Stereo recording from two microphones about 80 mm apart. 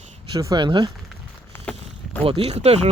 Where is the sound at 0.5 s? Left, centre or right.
Right.